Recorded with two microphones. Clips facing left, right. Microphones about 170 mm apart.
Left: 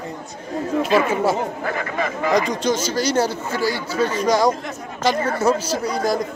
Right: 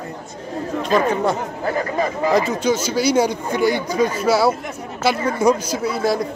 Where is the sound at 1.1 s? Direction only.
5° left (ahead or behind).